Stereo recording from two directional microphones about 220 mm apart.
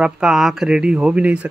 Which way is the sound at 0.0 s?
5° right (ahead or behind).